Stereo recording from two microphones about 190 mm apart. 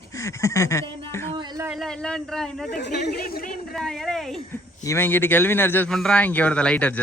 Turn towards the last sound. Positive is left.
turn(degrees=5)  # may be behind; listen again after turning